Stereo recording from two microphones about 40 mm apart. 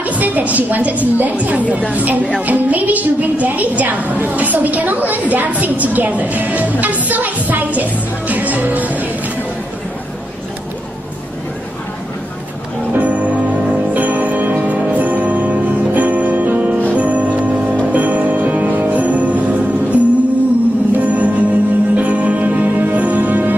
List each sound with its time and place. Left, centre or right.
0.0 s a woman's voice: right
12.9 s music: right